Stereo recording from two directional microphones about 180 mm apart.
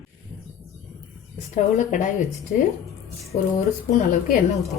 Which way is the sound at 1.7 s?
45° left (ahead or behind).